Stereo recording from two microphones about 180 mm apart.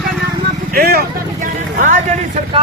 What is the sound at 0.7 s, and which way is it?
Speech, 60° right (ahead or behind).